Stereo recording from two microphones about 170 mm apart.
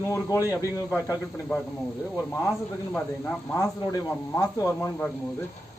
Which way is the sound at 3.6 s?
20° left (ahead or behind).